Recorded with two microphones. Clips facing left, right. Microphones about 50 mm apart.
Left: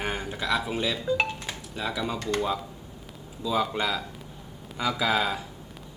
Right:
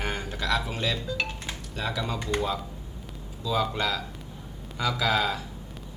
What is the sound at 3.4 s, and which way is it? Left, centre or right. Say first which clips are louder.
Speech: left 1 dB; centre.